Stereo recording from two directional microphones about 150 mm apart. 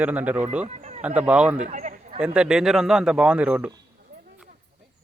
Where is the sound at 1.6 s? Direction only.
55° right (ahead or behind).